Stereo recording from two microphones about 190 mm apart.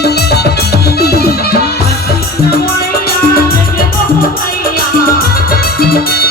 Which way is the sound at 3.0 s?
50° left (ahead or behind).